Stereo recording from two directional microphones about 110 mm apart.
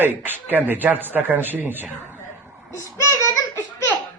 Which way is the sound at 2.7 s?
25° left (ahead or behind).